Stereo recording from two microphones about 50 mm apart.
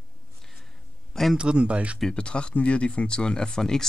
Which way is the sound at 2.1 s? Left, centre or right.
Left.